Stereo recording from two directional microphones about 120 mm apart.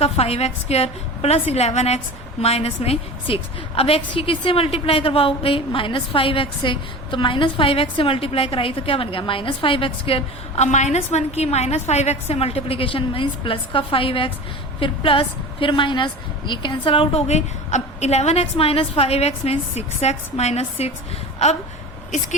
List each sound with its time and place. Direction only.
0.0 s a woman's voice: 55° left (ahead or behind)
10.7 s a woman's voice: 75° left (ahead or behind); by 20.9 s 60° left (ahead or behind)